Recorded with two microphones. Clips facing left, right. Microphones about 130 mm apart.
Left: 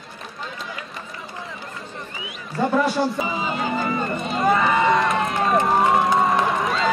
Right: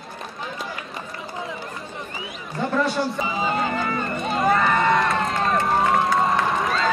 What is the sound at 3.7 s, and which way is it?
Run, 10° left (ahead or behind).